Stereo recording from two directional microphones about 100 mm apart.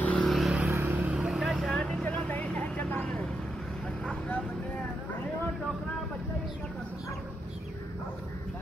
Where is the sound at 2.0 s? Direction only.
15° left (ahead or behind).